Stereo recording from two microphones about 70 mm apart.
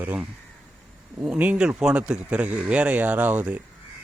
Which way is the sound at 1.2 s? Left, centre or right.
Right.